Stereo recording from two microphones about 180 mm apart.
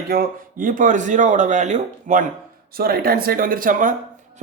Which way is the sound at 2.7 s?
55° right (ahead or behind).